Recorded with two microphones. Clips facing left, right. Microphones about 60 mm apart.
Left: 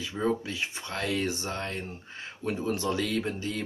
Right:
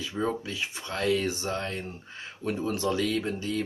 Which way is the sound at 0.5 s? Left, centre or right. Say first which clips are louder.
Even; left.